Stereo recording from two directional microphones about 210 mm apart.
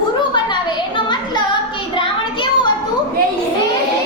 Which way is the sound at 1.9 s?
25° left (ahead or behind).